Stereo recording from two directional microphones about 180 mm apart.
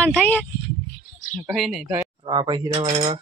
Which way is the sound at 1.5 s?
Centre (ahead or behind).